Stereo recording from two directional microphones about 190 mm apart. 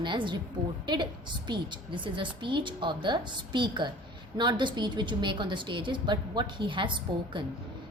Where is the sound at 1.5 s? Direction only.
25° right (ahead or behind).